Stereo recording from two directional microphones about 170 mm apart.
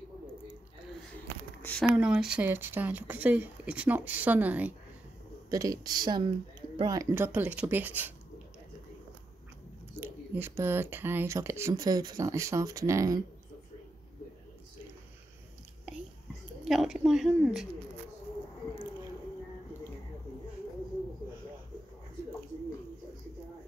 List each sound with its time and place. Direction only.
1.6 s a sound: 10° left (ahead or behind)
2.0 s speech: 5° right (ahead or behind)
5.5 s speech: 20° right (ahead or behind)
9.9 s speech: 15° right (ahead or behind)
16.6 s a woman's voice: centre (ahead or behind)